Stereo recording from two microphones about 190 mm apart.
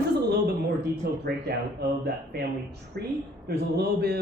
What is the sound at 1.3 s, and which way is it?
Speech, 60° right (ahead or behind).